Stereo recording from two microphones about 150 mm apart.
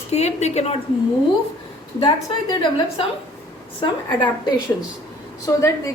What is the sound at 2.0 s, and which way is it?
A woman's voice, 30° left (ahead or behind).